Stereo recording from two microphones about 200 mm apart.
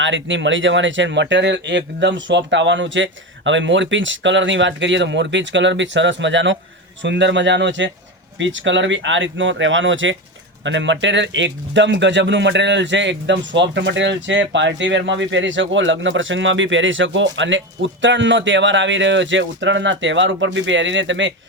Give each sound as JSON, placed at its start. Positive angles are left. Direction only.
{"t": 0.0, "sound": "speech", "side_deg": -65}